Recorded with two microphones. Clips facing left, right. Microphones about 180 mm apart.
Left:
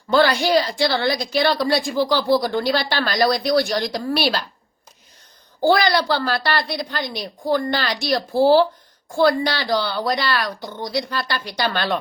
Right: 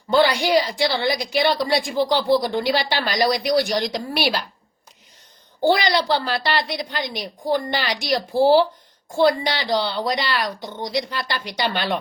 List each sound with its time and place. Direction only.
0.1 s a woman's voice: 15° right (ahead or behind)
5.6 s a woman's voice: 15° right (ahead or behind)